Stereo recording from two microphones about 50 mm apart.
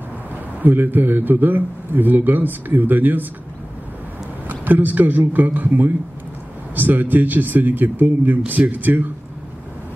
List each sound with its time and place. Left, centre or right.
0.6 s a man's voice: right
4.5 s a man's voice: right